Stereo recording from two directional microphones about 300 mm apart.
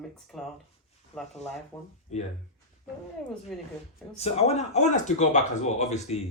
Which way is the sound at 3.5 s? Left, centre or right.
Centre.